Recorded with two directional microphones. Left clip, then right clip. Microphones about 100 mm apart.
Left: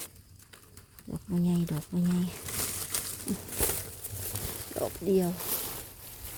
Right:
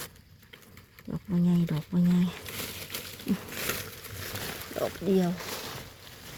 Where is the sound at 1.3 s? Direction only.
10° left (ahead or behind).